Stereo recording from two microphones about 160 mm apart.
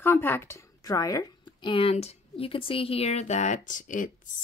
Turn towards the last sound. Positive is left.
turn(degrees=55)  # may be behind; listen again after turning